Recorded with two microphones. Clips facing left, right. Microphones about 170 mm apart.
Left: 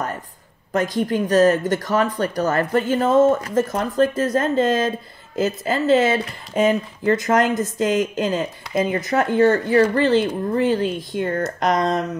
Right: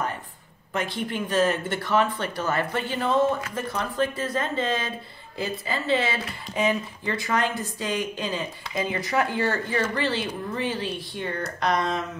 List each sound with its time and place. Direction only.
0.7 s speech: 40° left (ahead or behind)